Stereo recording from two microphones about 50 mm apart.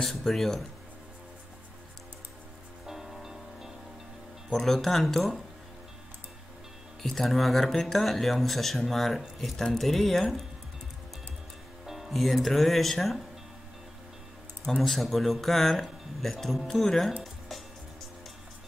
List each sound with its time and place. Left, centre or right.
0.0 s speech: centre
2.9 s music: centre
4.5 s speech: centre
7.0 s speech: centre
11.8 s speech: centre
14.8 s speech: centre